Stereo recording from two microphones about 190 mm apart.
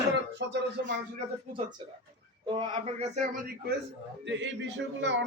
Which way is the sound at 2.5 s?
30° right (ahead or behind).